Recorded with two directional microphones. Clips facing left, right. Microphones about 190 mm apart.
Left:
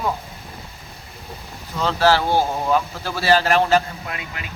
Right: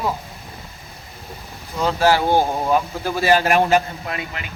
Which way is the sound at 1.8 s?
15° right (ahead or behind).